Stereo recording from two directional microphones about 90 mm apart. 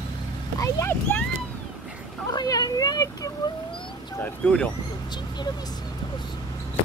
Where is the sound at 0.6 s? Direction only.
30° left (ahead or behind).